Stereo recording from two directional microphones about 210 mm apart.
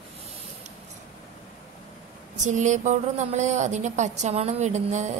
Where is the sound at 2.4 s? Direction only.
35° right (ahead or behind).